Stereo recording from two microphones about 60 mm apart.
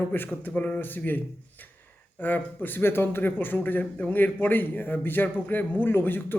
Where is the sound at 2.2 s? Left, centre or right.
Left.